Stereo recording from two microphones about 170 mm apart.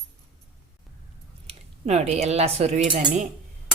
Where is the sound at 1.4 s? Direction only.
40° right (ahead or behind).